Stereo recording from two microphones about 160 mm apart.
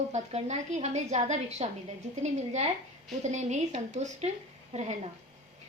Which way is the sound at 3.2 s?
45° right (ahead or behind).